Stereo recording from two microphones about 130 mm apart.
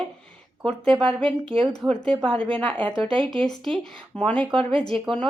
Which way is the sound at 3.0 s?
40° right (ahead or behind).